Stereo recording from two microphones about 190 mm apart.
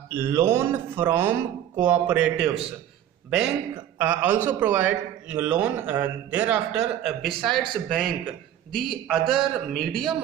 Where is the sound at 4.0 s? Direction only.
10° right (ahead or behind).